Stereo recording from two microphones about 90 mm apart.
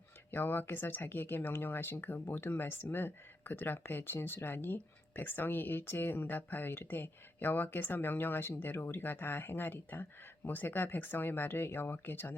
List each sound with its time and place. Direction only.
0.3 s speech: 25° left (ahead or behind)